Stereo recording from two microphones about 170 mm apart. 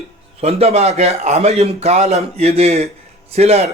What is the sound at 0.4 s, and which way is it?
Speech, 35° right (ahead or behind).